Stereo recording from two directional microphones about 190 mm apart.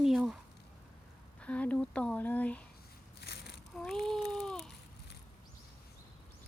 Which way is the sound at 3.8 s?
Centre (ahead or behind).